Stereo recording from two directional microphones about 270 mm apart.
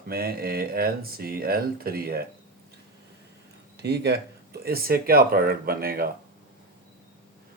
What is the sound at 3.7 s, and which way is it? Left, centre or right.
Speech, right.